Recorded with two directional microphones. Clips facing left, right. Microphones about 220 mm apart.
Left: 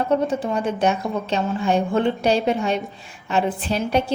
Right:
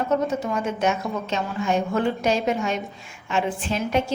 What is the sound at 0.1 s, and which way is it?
A woman's voice, 30° left (ahead or behind).